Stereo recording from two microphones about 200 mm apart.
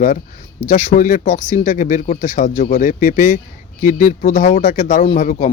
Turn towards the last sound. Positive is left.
turn(degrees=40)  # may be behind; listen again after turning